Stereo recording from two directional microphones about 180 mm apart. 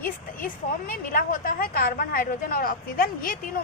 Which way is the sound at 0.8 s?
50° left (ahead or behind).